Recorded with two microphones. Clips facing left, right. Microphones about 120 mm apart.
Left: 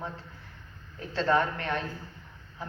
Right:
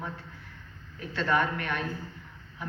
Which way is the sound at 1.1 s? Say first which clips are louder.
Left 1 dB; 30° left (ahead or behind).